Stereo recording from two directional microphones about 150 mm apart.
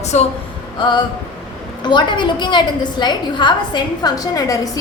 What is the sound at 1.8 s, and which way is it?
A woman's voice, 30° left (ahead or behind).